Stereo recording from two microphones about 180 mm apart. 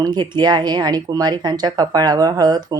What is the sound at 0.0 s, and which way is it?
Speech, 25° right (ahead or behind).